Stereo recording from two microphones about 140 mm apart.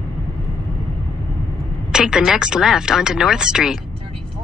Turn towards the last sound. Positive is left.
turn(degrees=-5)  # may be behind; listen again after turning